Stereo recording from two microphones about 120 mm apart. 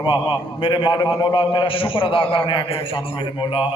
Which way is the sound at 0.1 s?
45° left (ahead or behind).